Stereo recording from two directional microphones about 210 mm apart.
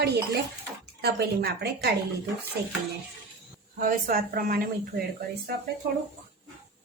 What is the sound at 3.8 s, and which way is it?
Speech, 40° right (ahead or behind).